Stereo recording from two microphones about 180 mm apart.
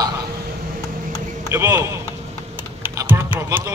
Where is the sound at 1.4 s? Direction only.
15° right (ahead or behind).